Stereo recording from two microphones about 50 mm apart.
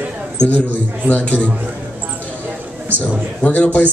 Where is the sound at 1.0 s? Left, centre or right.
Left.